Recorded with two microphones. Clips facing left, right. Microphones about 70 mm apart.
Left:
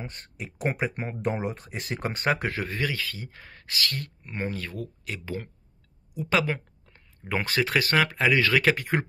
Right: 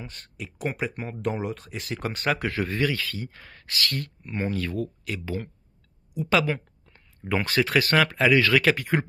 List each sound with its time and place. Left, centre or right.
0.0 s speech: left
2.6 s speech: centre